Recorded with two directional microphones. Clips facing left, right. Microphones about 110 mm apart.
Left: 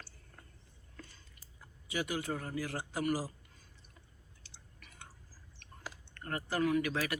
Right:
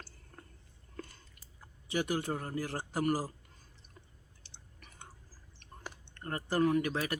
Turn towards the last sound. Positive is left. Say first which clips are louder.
# right 2 dB
turn(degrees=-30)  # may be behind; listen again after turning